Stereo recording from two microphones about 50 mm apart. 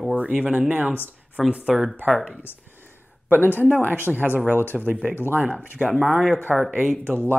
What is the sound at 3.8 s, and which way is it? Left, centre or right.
Speech, right.